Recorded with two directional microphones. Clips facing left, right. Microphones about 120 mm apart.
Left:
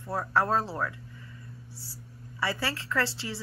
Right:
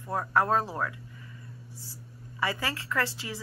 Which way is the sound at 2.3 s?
15° right (ahead or behind).